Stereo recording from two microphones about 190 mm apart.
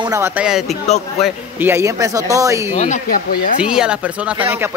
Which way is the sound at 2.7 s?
40° left (ahead or behind).